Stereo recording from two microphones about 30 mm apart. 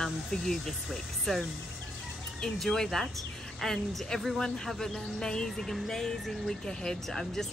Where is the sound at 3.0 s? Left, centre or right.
Centre.